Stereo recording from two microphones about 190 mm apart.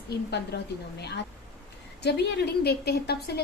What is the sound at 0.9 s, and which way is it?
A woman's voice, 60° left (ahead or behind).